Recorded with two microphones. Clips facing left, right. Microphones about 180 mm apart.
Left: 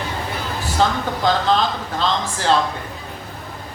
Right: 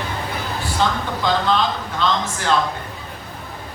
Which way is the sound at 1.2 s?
45° left (ahead or behind).